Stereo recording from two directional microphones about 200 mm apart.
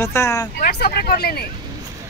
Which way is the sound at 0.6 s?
50° left (ahead or behind).